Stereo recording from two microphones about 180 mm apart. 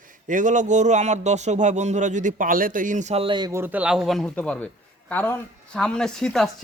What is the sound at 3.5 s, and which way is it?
Speech, 10° right (ahead or behind).